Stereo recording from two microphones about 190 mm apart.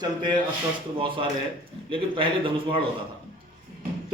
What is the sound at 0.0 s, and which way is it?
A man's voice, 25° right (ahead or behind).